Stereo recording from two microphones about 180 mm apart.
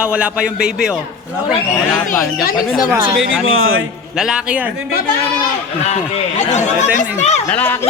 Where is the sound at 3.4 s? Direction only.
90° right.